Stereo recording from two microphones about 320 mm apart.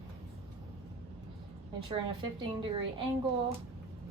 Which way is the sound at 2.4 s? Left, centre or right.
Centre.